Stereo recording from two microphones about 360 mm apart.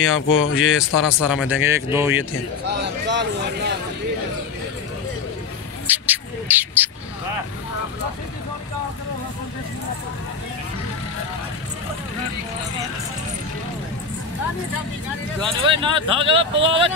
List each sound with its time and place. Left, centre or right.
0.0 s speech: left
0.6 s speech: centre
2.7 s speech: right
5.9 s speech: centre
15.6 s speech: centre